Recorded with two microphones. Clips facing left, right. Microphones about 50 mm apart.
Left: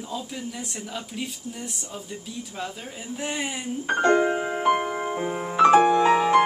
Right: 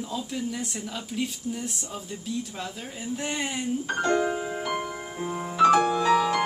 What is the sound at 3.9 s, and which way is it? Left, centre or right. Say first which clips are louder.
Music: left 6 dB; left.